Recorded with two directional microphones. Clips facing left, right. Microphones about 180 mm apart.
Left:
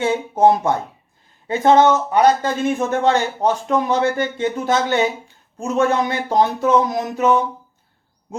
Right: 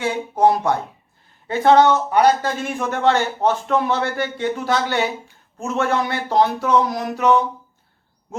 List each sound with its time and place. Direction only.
0.0 s speech: 20° left (ahead or behind)